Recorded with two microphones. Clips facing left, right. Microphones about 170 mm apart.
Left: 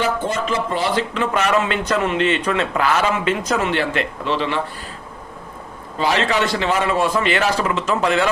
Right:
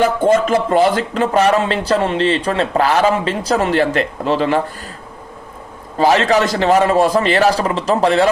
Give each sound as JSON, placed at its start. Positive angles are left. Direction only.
{"t": 0.0, "sound": "speech", "side_deg": -50}
{"t": 6.0, "sound": "speech", "side_deg": -40}